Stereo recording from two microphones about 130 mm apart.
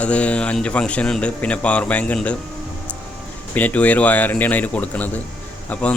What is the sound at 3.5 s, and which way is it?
A man's voice, 15° left (ahead or behind).